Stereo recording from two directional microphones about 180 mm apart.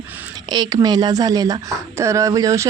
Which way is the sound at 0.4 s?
25° right (ahead or behind).